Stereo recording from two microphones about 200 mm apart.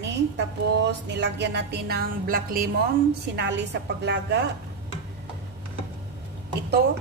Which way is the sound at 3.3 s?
60° right (ahead or behind).